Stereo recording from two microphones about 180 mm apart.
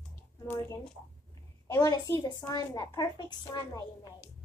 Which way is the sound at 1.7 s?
20° left (ahead or behind).